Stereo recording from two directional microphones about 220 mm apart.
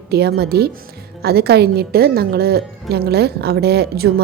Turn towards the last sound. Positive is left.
turn(degrees=-45)  # may be behind; listen again after turning